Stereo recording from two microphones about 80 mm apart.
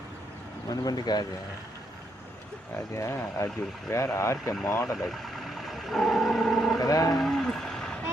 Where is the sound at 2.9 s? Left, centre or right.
Left.